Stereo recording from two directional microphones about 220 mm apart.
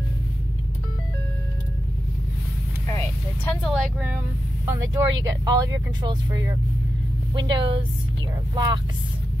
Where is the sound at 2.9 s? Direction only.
10° left (ahead or behind).